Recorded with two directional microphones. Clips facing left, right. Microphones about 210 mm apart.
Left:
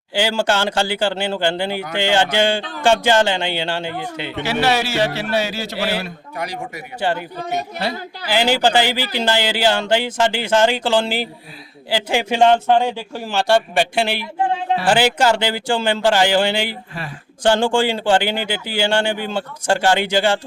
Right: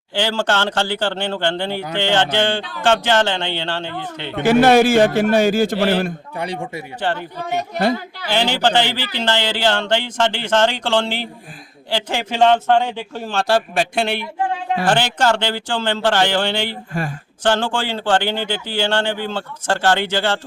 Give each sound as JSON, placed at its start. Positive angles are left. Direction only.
{"t": 0.1, "sound": "a man's voice", "side_deg": 10}
{"t": 4.6, "sound": "a man's voice", "side_deg": -50}
{"t": 6.3, "sound": "speech", "side_deg": -30}
{"t": 7.0, "sound": "a man's voice", "side_deg": 10}
{"t": 8.3, "sound": "a man's voice", "side_deg": 10}